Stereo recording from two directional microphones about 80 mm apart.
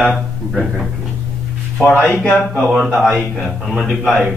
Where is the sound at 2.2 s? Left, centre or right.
Centre.